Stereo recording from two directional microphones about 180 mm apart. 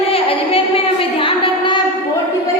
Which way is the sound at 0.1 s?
30° left (ahead or behind).